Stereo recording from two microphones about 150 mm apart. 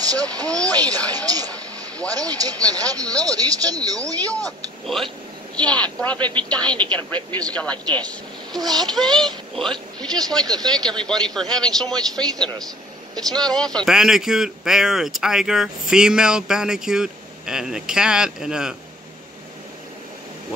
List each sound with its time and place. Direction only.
0.0 s speech: 25° right (ahead or behind)
4.5 s speech: centre (ahead or behind)
7.1 s speech: 30° right (ahead or behind)
7.5 s speech: 10° left (ahead or behind)
8.5 s speech: 25° right (ahead or behind)
9.2 s speech: 5° left (ahead or behind)